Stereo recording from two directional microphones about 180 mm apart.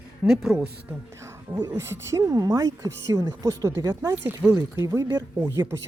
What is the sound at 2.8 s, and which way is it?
Speech, 80° right.